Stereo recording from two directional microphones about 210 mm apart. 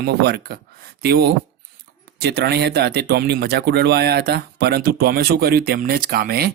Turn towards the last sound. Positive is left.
turn(degrees=-45)  # may be behind; listen again after turning